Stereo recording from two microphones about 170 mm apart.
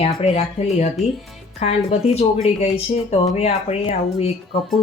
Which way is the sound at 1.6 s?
40° left (ahead or behind).